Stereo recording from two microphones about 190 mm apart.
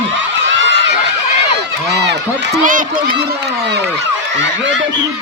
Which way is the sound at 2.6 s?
45° right (ahead or behind).